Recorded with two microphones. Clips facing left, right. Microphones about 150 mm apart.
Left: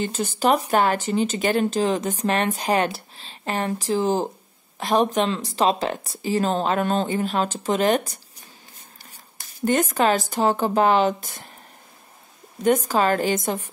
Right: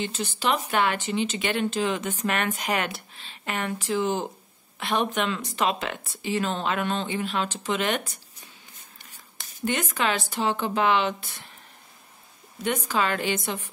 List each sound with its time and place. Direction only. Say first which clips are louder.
0.0 s speech: left 6 dB; 45° left (ahead or behind)
9.7 s speech: left 7 dB; 45° left (ahead or behind)
12.6 s speech: left 7 dB; 40° left (ahead or behind)